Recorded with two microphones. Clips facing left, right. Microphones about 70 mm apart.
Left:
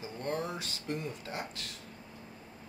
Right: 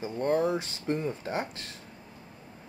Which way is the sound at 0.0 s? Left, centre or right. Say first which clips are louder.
Right 9 dB; right.